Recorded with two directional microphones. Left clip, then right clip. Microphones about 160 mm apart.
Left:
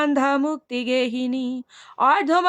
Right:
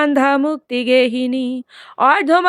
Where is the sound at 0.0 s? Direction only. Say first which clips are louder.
Right 6 dB; 30° right (ahead or behind).